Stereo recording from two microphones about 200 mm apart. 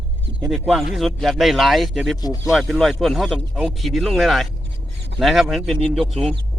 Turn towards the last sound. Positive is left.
turn(degrees=0)  # may be behind; listen again after turning